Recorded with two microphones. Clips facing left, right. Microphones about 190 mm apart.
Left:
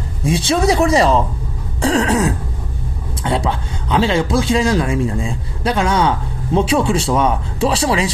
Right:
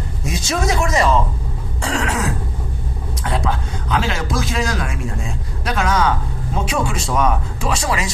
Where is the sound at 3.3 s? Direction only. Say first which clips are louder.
Left 3 dB; 30° left (ahead or behind).